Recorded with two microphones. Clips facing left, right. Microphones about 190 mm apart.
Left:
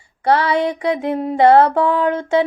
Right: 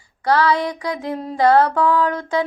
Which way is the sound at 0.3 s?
25° left (ahead or behind).